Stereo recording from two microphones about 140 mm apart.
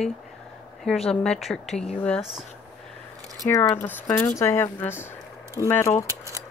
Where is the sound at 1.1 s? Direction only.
5° left (ahead or behind).